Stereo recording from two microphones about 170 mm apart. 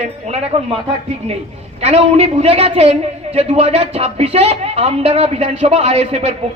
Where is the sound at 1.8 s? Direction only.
40° right (ahead or behind).